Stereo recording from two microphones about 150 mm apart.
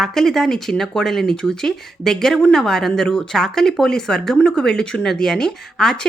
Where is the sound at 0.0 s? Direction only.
Centre (ahead or behind).